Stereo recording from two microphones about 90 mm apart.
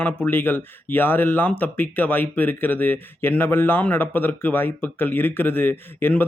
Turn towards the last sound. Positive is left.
turn(degrees=20)  # may be behind; listen again after turning